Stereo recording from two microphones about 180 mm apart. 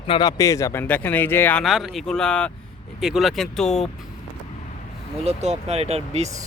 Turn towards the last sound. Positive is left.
turn(degrees=-35)  # may be behind; listen again after turning